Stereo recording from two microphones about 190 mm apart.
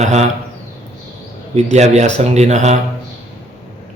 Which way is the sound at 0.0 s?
35° right (ahead or behind).